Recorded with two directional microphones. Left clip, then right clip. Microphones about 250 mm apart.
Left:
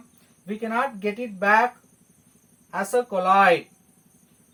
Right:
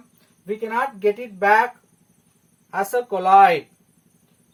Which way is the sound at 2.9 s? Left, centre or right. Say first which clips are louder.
Right 4 dB; right.